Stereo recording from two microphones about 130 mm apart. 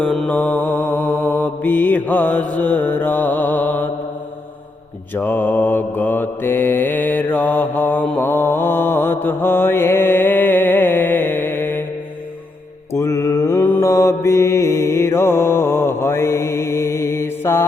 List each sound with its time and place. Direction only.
0.0 s mantra: 5° left (ahead or behind)
5.1 s mantra: 15° left (ahead or behind)
12.9 s mantra: 25° left (ahead or behind)